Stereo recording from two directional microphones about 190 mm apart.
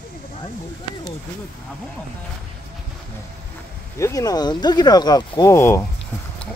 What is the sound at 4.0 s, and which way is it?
Speech, 15° left (ahead or behind).